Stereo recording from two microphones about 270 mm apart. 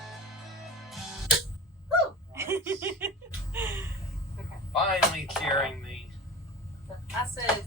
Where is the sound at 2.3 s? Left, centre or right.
Centre.